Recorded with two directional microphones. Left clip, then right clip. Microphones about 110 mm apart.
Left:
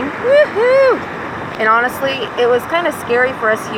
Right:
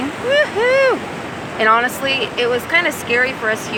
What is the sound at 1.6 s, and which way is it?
Speech, 90° right.